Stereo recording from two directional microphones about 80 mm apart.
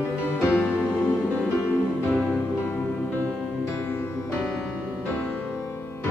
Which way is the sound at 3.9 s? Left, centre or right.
Left.